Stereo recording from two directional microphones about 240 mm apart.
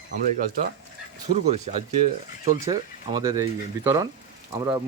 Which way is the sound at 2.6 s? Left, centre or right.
Centre.